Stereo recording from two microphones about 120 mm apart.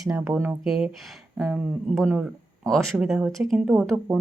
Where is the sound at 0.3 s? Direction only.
35° right (ahead or behind).